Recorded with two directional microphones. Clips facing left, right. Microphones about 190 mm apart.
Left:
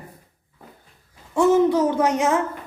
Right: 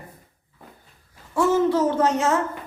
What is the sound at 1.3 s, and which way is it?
A child's voice, 20° left (ahead or behind).